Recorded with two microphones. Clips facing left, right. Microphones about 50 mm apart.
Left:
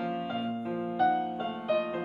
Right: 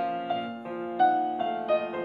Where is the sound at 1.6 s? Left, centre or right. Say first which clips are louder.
Right 2 dB; centre.